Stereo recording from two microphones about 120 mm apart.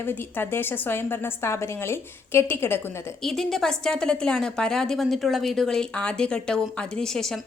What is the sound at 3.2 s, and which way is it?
A woman's voice, 5° left (ahead or behind).